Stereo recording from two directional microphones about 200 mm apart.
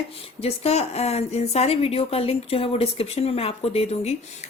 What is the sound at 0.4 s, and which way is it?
A woman's voice, 30° left (ahead or behind).